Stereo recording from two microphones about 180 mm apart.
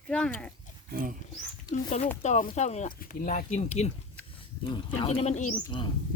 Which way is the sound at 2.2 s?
45° left (ahead or behind).